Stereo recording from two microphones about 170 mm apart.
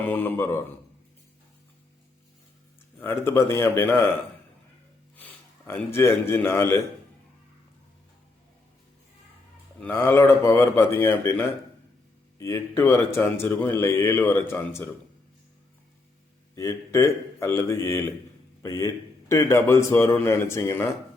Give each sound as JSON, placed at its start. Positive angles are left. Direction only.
{"t": 0.0, "sound": "a man's voice", "side_deg": 10}
{"t": 3.0, "sound": "a man's voice", "side_deg": 15}
{"t": 5.1, "sound": "a man's voice", "side_deg": 10}
{"t": 9.8, "sound": "a man's voice", "side_deg": 15}
{"t": 16.6, "sound": "a man's voice", "side_deg": 15}